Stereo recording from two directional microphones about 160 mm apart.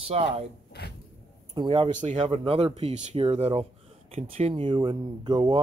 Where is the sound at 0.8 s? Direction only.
85° left.